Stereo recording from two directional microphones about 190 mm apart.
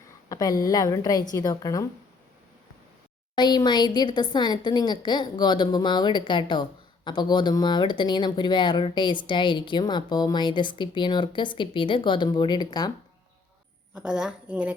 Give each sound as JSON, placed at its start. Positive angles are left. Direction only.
{"t": 0.3, "sound": "a woman's voice", "side_deg": 20}
{"t": 3.3, "sound": "a woman's voice", "side_deg": 20}
{"t": 13.9, "sound": "speech", "side_deg": -5}